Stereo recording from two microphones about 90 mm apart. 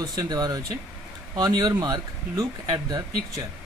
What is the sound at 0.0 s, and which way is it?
Speech, 45° right (ahead or behind).